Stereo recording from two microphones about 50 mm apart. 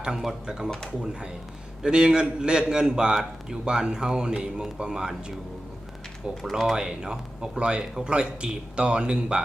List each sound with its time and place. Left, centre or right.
0.0 s a man's voice: centre
1.8 s a man's voice: centre
6.4 s speech: centre
6.7 s a man's voice: centre